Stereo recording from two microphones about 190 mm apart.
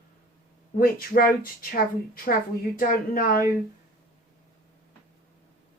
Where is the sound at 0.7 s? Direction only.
50° left (ahead or behind).